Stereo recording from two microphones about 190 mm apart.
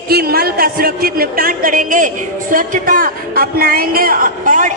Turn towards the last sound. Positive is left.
turn(degrees=-45)  # may be behind; listen again after turning